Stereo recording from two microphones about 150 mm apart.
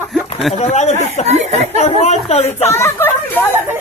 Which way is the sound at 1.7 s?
45° left (ahead or behind).